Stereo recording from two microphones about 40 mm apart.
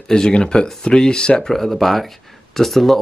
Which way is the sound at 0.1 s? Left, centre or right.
Centre.